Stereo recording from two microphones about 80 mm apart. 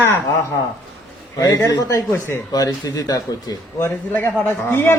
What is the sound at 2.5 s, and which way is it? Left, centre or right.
Speech, left.